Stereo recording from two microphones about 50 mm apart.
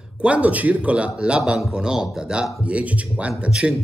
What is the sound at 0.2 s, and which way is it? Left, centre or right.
Speech, right.